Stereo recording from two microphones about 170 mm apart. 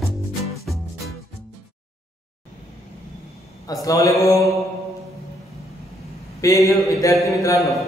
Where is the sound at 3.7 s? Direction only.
20° left (ahead or behind).